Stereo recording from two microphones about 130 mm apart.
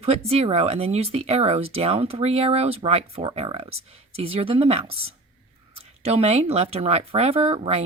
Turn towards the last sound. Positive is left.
turn(degrees=-55)  # may be behind; listen again after turning